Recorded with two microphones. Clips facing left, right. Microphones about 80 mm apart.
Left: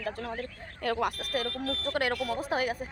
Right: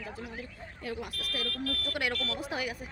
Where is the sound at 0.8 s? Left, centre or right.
Left.